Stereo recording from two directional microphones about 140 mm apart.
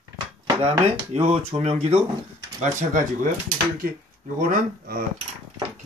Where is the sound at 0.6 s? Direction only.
45° right (ahead or behind).